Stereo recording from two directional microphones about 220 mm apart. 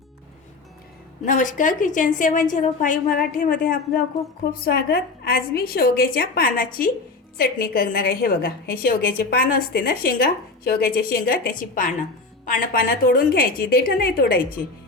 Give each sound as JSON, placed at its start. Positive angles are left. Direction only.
{"t": 1.2, "sound": "a woman's voice", "side_deg": 35}